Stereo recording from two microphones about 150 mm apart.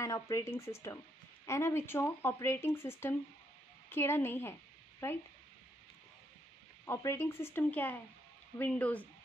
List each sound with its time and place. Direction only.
0.0 s speech: 20° left (ahead or behind)
6.9 s speech: 20° left (ahead or behind)